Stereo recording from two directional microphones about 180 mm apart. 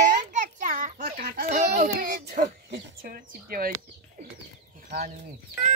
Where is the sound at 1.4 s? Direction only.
40° right (ahead or behind).